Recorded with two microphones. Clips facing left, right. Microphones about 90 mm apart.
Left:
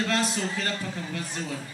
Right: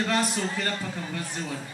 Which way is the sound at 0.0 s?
15° right (ahead or behind).